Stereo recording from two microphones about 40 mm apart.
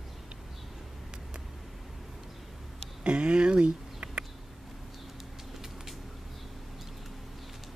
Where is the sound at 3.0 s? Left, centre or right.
Right.